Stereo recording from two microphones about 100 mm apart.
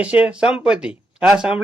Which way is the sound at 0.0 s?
10° right (ahead or behind).